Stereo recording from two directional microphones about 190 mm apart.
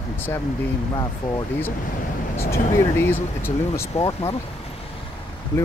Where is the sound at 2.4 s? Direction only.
15° left (ahead or behind).